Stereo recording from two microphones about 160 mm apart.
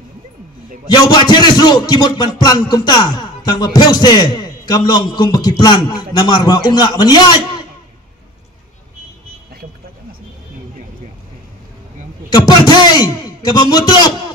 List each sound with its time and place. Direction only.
0.8 s music: 25° left (ahead or behind)
12.4 s music: 25° left (ahead or behind)